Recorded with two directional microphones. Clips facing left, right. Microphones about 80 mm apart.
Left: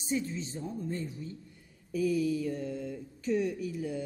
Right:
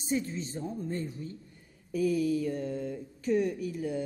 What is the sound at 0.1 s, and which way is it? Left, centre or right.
A woman's voice, right.